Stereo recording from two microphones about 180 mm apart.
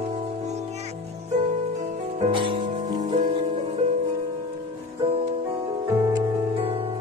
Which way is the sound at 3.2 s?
40° right (ahead or behind).